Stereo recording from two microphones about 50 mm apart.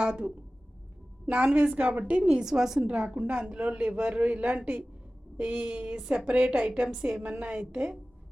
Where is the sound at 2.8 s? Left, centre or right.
Right.